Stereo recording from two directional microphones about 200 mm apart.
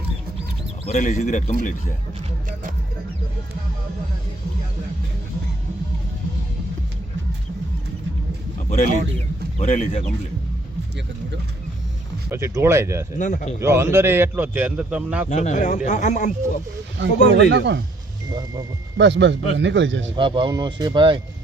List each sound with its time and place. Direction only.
0.9 s speech: 40° left (ahead or behind)
9.6 s speech: 35° left (ahead or behind)
12.3 s a man's voice: 10° right (ahead or behind)
13.1 s speech: 40° left (ahead or behind)
13.6 s a man's voice: 15° right (ahead or behind)
15.3 s speech: 35° left (ahead or behind)
17.0 s speech: 65° right (ahead or behind)
18.3 s speech: 20° right (ahead or behind)
18.9 s speech: 65° right (ahead or behind)
20.1 s speech: 25° right (ahead or behind)